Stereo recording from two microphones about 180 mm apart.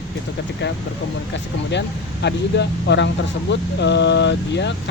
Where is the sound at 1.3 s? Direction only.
75° left (ahead or behind).